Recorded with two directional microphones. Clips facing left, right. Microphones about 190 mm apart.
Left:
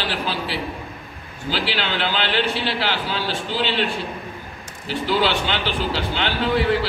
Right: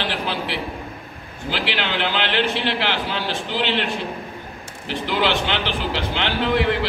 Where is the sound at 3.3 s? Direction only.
15° right (ahead or behind).